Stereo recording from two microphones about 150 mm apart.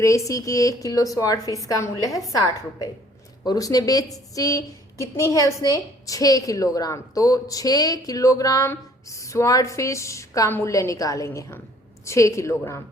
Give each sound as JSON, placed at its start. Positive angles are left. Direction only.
{"t": 0.0, "sound": "speech", "side_deg": 20}